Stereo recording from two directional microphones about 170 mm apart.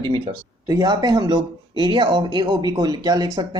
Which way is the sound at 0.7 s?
25° right (ahead or behind).